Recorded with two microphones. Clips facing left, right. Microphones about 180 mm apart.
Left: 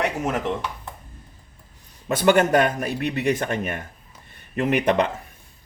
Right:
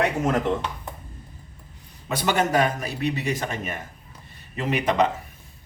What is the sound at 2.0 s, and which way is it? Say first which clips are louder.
A man's voice: left 6 dB; 55° left (ahead or behind).